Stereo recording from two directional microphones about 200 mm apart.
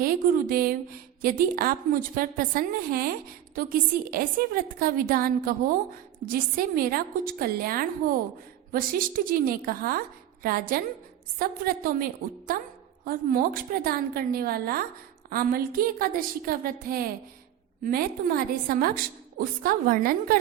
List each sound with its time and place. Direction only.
0.0 s a woman's voice: 45° right (ahead or behind)
13.1 s a woman's voice: 45° right (ahead or behind)